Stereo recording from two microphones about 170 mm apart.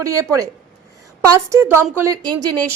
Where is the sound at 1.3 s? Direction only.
15° right (ahead or behind).